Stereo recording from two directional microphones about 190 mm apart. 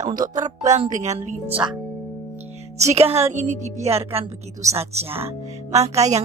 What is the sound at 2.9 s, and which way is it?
Speech, 35° right (ahead or behind).